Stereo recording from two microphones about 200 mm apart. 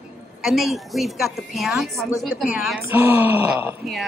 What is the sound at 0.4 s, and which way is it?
A woman's voice, centre (ahead or behind).